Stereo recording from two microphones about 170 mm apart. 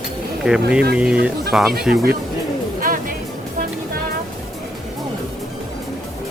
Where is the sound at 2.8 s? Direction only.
55° right (ahead or behind).